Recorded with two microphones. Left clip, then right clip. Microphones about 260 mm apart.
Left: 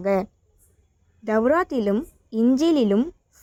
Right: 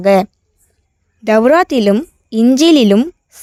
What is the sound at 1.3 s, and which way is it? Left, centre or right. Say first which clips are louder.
Speech: right 11 dB; right.